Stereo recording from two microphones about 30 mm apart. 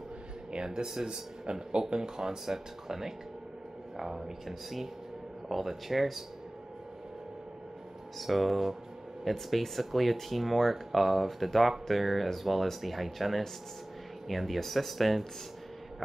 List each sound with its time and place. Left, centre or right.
1.0 s speech: right; by 6.2 s centre
8.2 s speech: centre